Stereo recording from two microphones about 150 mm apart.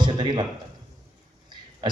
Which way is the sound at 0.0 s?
30° right (ahead or behind).